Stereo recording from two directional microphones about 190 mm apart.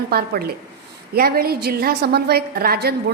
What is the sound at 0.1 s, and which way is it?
A woman's voice, 55° right (ahead or behind).